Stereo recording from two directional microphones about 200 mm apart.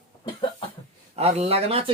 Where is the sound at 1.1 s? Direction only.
30° right (ahead or behind).